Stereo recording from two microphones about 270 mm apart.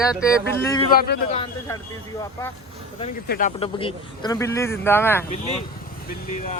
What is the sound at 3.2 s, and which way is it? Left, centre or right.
Speech, left.